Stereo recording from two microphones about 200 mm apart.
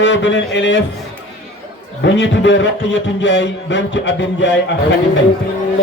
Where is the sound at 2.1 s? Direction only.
65° left (ahead or behind).